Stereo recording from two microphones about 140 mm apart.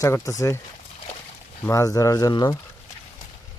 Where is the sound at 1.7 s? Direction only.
25° left (ahead or behind).